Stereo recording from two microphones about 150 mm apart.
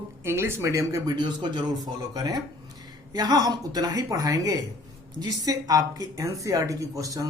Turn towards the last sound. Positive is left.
turn(degrees=-25)  # may be behind; listen again after turning